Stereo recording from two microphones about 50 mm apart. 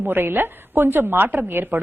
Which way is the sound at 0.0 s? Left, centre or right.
Right.